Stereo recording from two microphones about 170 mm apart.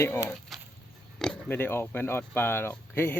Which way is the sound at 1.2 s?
5° left (ahead or behind).